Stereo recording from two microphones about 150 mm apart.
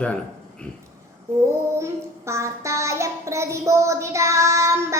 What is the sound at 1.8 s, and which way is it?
Child singing, 20° right (ahead or behind).